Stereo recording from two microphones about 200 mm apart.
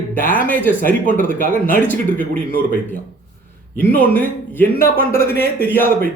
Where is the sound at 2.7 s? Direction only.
40° left (ahead or behind).